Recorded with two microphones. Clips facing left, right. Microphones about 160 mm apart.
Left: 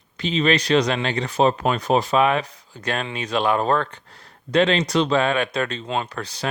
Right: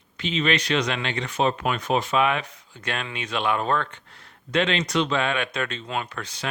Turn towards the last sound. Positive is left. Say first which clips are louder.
# left 4 dB
turn(degrees=35)  # may be behind; listen again after turning